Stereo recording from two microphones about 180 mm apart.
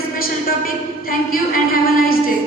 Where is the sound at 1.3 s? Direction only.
55° left (ahead or behind).